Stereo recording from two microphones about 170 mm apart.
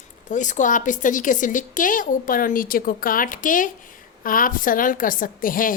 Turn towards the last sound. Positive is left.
turn(degrees=55)  # may be behind; listen again after turning